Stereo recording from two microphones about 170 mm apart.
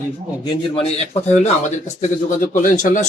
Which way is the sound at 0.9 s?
35° left (ahead or behind).